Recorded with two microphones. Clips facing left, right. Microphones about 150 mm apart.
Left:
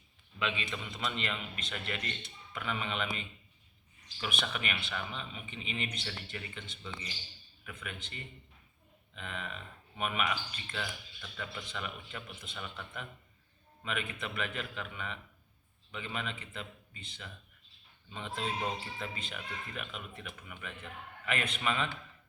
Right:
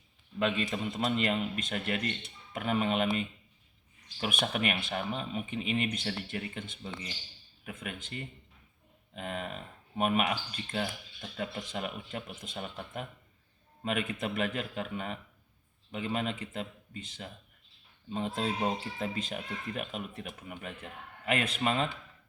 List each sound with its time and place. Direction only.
0.3 s speech: 45° right (ahead or behind)
4.2 s speech: 50° right (ahead or behind)